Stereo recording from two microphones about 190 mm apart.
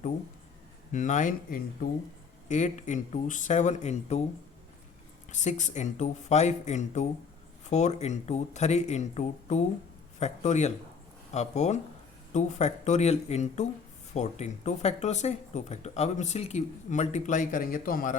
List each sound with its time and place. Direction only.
0.9 s speech: 40° left (ahead or behind)
5.3 s speech: 40° left (ahead or behind)